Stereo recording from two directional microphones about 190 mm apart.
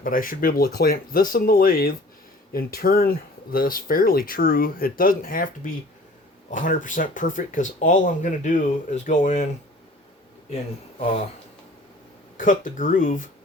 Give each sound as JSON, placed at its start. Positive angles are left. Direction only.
{"t": 0.0, "sound": "speech", "side_deg": 45}
{"t": 12.4, "sound": "speech", "side_deg": 45}